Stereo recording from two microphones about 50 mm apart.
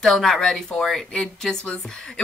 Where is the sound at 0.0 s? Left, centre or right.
Centre.